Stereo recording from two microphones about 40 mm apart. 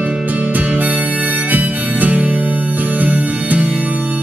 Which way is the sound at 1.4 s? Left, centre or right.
Right.